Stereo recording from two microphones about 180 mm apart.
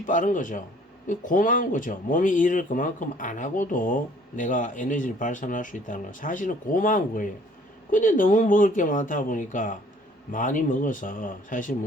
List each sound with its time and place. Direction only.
0.0 s speech: 45° left (ahead or behind)